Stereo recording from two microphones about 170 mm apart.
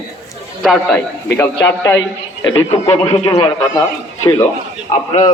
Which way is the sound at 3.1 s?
25° left (ahead or behind).